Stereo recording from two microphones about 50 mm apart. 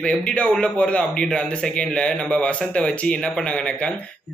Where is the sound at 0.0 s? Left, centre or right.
Left.